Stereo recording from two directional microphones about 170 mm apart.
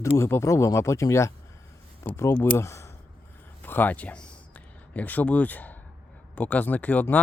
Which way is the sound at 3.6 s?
10° left (ahead or behind).